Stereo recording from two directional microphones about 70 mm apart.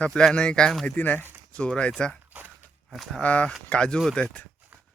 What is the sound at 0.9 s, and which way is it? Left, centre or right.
Speech, left.